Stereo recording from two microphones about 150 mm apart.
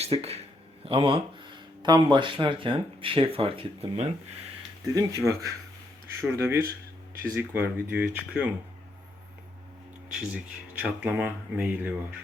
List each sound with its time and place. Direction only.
0.0 s a man's voice: 45° right (ahead or behind)
4.9 s speech: 20° right (ahead or behind)
6.6 s a sound: 75° right (ahead or behind)
7.3 s speech: 15° right (ahead or behind)
10.1 s speech: 5° right (ahead or behind)